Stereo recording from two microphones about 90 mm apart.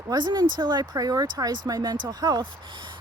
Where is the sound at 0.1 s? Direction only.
55° right (ahead or behind).